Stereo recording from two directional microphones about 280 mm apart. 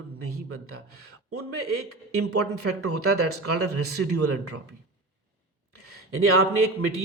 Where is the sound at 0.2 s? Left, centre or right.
Right.